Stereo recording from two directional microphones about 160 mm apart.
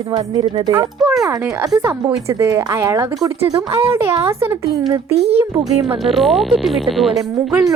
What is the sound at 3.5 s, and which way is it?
Speech, 35° right (ahead or behind).